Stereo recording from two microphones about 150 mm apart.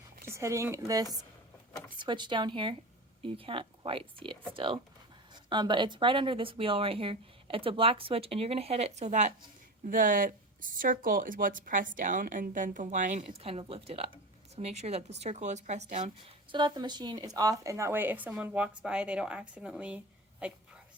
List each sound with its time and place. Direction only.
0.3 s speech: 20° right (ahead or behind); by 9.3 s 50° right (ahead or behind)
9.8 s speech: 65° right (ahead or behind)
13.2 s speech: 40° right (ahead or behind)
16.5 s speech: 30° right (ahead or behind); by 20.6 s 10° right (ahead or behind)